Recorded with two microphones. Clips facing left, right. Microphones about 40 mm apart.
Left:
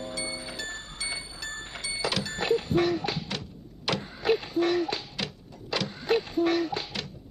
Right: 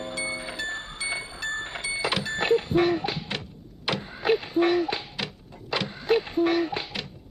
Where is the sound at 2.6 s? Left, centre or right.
Right.